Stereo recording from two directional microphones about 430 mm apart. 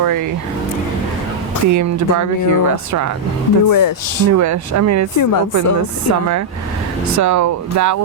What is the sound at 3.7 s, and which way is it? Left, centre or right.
Speech, left.